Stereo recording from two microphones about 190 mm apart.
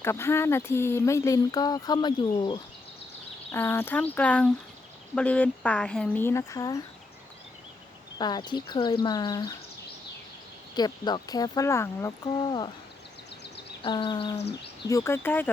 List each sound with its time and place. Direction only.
0.0 s speech: 15° left (ahead or behind)
3.5 s speech: 10° left (ahead or behind)
8.2 s speech: 20° left (ahead or behind)
10.8 s speech: 20° left (ahead or behind)
13.4 s a sound: 60° left (ahead or behind)
13.8 s speech: 25° left (ahead or behind)
14.8 s speech: 15° left (ahead or behind)